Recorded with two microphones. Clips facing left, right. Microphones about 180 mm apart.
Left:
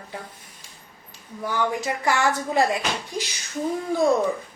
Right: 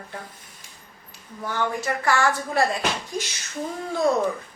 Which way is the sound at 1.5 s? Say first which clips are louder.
Left 1 dB; 15° left (ahead or behind).